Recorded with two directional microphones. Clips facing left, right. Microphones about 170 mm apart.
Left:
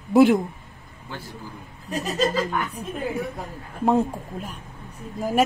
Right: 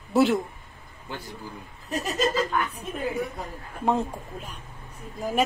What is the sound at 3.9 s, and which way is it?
Speech, 5° left (ahead or behind).